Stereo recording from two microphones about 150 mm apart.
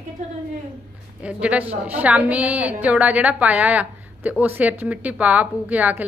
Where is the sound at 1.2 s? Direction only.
10° right (ahead or behind).